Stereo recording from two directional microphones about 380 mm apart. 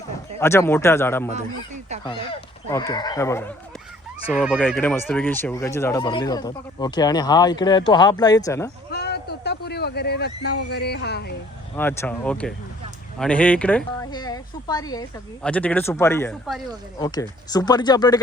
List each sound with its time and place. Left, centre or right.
0.3 s speech: centre
8.9 s speech: left
11.8 s speech: centre